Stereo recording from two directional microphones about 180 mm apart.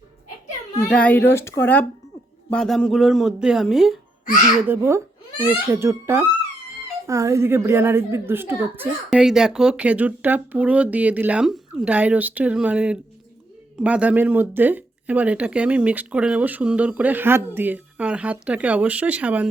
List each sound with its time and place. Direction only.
0.9 s a woman's voice: 5° left (ahead or behind)
4.7 s a child's voice: 15° right (ahead or behind)